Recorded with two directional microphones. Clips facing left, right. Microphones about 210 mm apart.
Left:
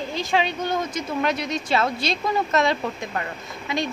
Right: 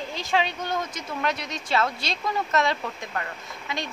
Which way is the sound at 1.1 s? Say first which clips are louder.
Left 4 dB; 15° left (ahead or behind).